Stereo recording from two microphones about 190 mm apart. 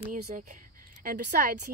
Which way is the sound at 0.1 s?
40° right (ahead or behind).